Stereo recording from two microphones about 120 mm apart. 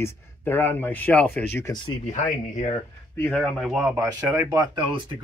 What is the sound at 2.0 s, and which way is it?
Speech, 90° left.